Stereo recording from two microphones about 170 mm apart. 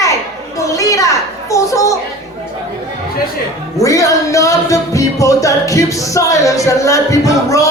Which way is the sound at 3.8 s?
20° left (ahead or behind).